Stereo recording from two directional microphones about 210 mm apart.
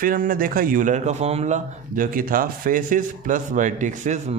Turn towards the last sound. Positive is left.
turn(degrees=-35)  # may be behind; listen again after turning